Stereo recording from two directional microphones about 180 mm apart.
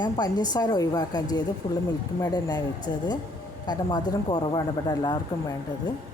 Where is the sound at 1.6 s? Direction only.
35° left (ahead or behind).